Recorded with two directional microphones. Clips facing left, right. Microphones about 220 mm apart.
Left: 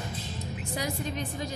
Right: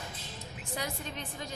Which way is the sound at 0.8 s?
10° left (ahead or behind).